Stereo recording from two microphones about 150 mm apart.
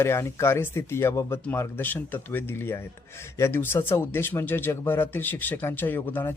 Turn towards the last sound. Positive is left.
turn(degrees=15)  # may be behind; listen again after turning